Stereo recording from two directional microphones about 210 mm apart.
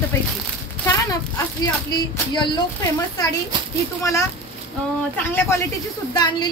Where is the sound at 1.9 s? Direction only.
20° left (ahead or behind).